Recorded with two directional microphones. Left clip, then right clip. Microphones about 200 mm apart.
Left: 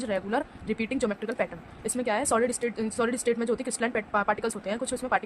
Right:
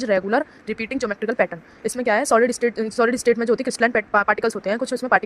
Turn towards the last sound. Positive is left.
turn(degrees=-30)  # may be behind; listen again after turning